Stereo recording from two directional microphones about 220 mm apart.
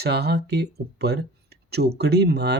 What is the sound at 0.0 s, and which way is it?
Speech, 45° right (ahead or behind).